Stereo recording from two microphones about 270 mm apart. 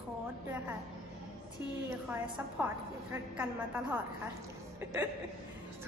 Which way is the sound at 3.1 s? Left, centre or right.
Centre.